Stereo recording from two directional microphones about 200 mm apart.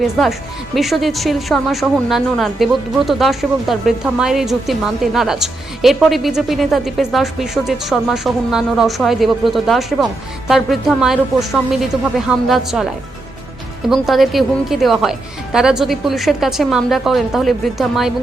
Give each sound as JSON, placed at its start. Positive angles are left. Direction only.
{"t": 0.0, "sound": "speech", "side_deg": 0}
{"t": 13.9, "sound": "speech", "side_deg": 0}